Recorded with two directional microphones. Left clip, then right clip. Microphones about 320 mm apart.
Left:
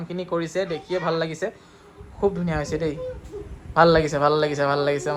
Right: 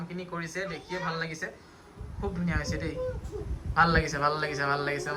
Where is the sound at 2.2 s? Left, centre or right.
Centre.